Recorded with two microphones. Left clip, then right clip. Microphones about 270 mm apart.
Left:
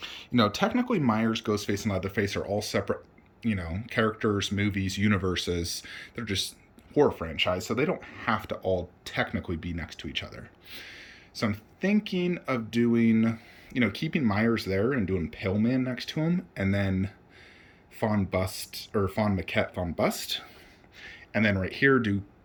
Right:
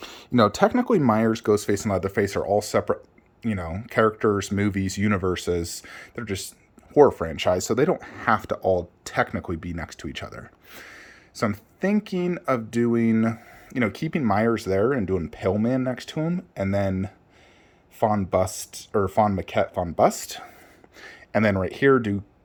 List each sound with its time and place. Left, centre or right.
0.0 s speech: right